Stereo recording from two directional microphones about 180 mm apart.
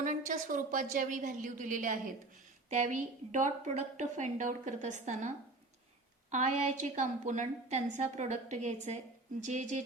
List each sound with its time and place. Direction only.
0.0 s a woman's voice: 45° right (ahead or behind)
6.3 s a woman's voice: 40° right (ahead or behind)